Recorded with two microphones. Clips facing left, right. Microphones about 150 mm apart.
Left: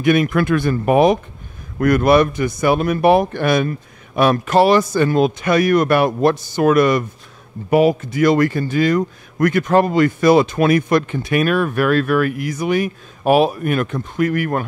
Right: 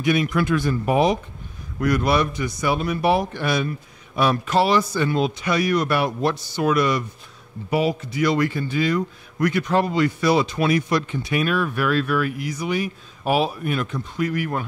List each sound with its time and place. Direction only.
0.0 s speech: 55° left (ahead or behind)